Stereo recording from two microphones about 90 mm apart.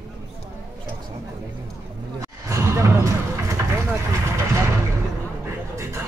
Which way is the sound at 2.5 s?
35° right (ahead or behind).